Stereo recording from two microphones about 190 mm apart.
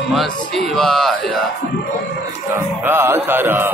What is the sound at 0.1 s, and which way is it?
Speech, centre (ahead or behind).